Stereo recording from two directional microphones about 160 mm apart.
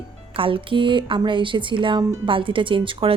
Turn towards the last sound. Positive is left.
turn(degrees=-35)  # may be behind; listen again after turning